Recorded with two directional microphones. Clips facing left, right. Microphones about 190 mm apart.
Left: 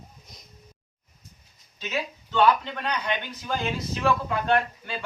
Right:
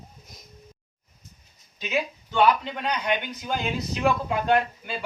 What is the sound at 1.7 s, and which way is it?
Speech, 10° right (ahead or behind).